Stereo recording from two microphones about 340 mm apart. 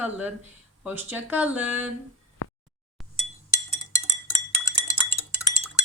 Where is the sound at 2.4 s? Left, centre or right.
Left.